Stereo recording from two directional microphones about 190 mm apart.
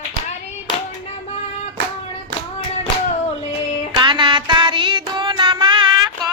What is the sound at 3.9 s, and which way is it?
Child singing, 25° right (ahead or behind).